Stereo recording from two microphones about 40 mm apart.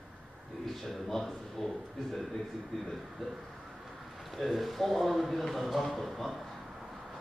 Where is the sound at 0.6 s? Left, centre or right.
Centre.